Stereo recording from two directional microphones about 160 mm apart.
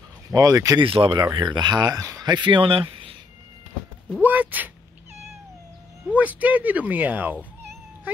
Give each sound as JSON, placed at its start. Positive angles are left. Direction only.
{"t": 0.3, "sound": "speech", "side_deg": -25}
{"t": 0.8, "sound": "speech", "side_deg": -35}
{"t": 4.2, "sound": "speech", "side_deg": -10}
{"t": 6.0, "sound": "speech", "side_deg": -10}